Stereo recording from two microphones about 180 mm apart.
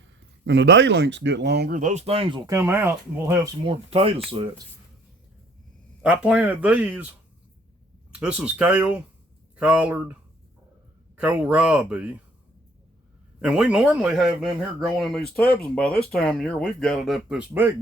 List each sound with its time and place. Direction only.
0.0 s speech: 80° right; by 1.8 s 65° right (ahead or behind)
1.8 s speech: 40° right (ahead or behind)
2.5 s speech: 15° right (ahead or behind)
3.7 s speech: 30° right (ahead or behind)
6.0 s speech: 5° right (ahead or behind)
8.1 s speech: 5° right (ahead or behind)
11.2 s speech: 10° right (ahead or behind)
13.4 s speech: 5° right (ahead or behind)